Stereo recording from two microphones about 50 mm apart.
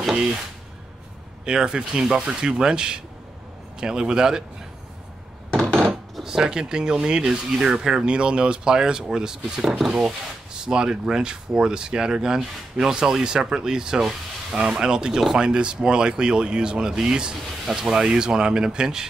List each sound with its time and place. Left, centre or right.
1.4 s speech: centre
5.5 s a sound: centre
6.2 s speech: centre
10.0 s speech: centre